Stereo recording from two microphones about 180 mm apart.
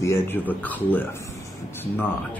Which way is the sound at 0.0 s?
15° left (ahead or behind).